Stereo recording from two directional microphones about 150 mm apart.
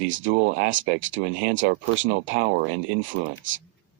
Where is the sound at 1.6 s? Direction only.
90° right.